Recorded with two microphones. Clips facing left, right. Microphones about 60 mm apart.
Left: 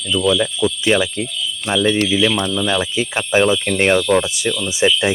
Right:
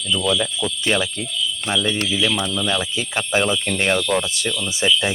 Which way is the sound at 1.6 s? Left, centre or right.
Left.